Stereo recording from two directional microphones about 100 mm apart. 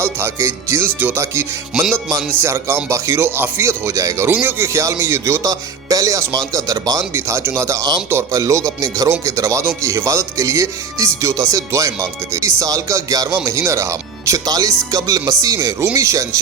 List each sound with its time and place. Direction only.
0.0 s speech: 25° right (ahead or behind)
1.7 s music: 5° right (ahead or behind)
2.4 s speech: 25° right (ahead or behind)